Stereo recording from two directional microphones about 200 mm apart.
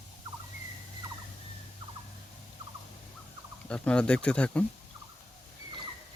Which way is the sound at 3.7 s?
5° left (ahead or behind).